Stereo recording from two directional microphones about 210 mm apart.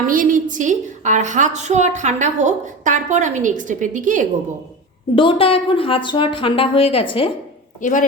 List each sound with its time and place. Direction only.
0.0 s a woman's voice: 40° right (ahead or behind)
5.1 s a woman's voice: 25° left (ahead or behind)
7.8 s speech: 40° left (ahead or behind)